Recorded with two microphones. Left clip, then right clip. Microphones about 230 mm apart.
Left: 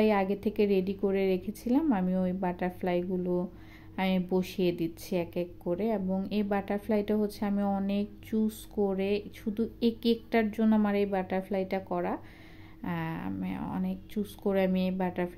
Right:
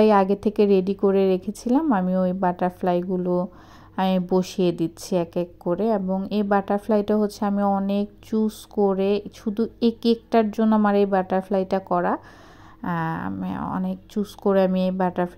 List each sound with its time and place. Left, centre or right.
0.0 s a woman's voice: right